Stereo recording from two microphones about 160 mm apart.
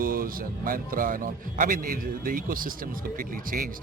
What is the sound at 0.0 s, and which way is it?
Speech, 65° right (ahead or behind).